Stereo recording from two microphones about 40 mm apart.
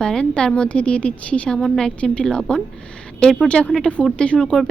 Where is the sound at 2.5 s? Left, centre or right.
Left.